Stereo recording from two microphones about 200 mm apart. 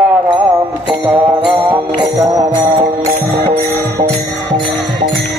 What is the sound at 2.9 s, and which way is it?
Music, 35° right (ahead or behind).